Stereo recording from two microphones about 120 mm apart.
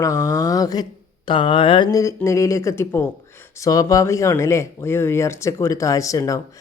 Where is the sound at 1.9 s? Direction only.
25° left (ahead or behind).